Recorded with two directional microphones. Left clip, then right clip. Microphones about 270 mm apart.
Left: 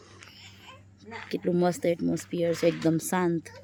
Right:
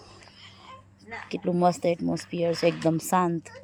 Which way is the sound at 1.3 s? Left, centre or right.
Centre.